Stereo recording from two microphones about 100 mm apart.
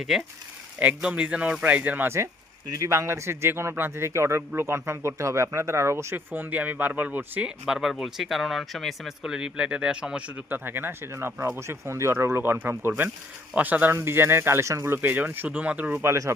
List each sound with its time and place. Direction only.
0.1 s speech: centre (ahead or behind)
7.6 s speech: 5° right (ahead or behind); by 14.9 s 30° right (ahead or behind)
14.9 s speech: 20° right (ahead or behind)